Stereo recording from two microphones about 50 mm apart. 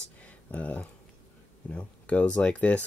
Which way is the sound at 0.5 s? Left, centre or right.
Left.